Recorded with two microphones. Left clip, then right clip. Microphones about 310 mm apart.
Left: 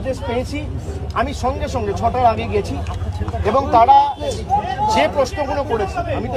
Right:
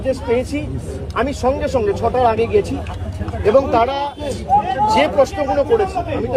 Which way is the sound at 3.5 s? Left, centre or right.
Centre.